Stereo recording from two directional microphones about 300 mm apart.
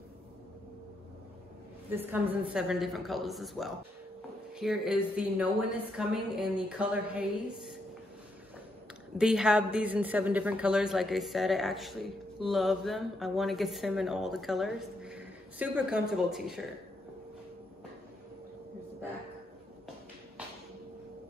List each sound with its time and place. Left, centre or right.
1.9 s a woman's voice: centre
9.2 s a woman's voice: centre